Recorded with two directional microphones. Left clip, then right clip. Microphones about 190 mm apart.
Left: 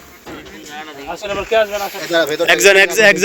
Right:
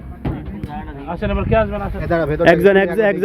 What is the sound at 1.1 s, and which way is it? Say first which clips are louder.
Speech: left 1 dB; 40° left (ahead or behind).